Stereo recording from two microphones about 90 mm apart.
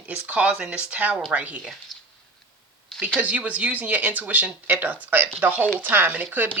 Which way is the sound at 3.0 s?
15° right (ahead or behind).